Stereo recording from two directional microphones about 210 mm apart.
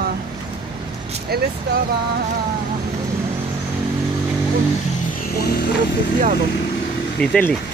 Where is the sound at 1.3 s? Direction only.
50° right (ahead or behind).